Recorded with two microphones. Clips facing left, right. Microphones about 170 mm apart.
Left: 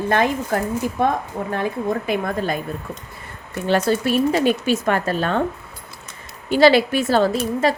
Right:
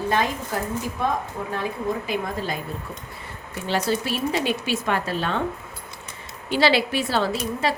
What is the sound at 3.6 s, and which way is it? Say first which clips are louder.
Speech: left 6 dB; 55° left (ahead or behind).